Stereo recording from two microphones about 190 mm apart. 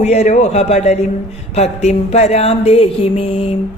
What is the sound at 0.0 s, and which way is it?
Mantra, 35° left (ahead or behind).